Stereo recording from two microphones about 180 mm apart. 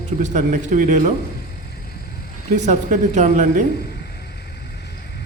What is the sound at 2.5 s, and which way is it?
Speech, 40° right (ahead or behind).